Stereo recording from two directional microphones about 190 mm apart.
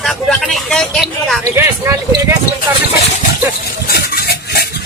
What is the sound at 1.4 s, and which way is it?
Speech, 15° right (ahead or behind).